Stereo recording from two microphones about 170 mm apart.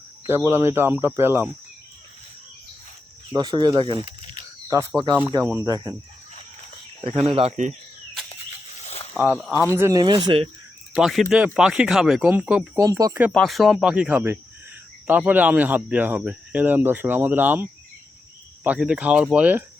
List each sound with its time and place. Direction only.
0.3 s speech: 15° right (ahead or behind)
3.3 s speech: 25° right (ahead or behind)
4.7 s speech: 15° right (ahead or behind)
7.1 s speech: 35° right (ahead or behind)
9.1 s speech: 10° right (ahead or behind)
10.2 s speech: 35° right (ahead or behind)
10.9 s speech: centre (ahead or behind)
12.7 s speech: 20° right (ahead or behind)
13.3 s speech: centre (ahead or behind)